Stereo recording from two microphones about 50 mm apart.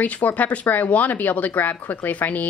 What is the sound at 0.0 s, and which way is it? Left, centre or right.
A woman's voice, left.